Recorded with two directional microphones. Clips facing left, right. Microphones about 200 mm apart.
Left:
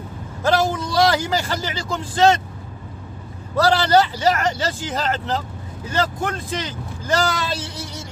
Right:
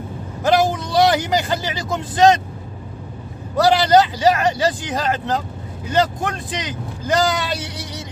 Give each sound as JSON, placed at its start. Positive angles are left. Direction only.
{"t": 0.4, "sound": "a man's voice", "side_deg": -15}
{"t": 3.6, "sound": "speech", "side_deg": -15}